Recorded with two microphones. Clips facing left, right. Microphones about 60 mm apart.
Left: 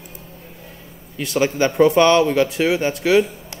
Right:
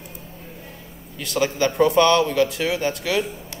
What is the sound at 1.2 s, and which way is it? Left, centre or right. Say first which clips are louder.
Speech: left 3 dB; left.